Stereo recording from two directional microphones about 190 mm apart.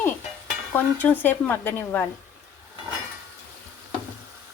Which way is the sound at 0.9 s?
10° left (ahead or behind).